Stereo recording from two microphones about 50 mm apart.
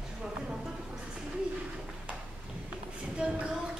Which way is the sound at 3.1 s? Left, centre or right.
Right.